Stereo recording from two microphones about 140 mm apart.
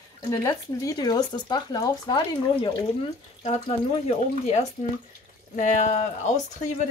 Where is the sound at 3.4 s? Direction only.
50° left (ahead or behind).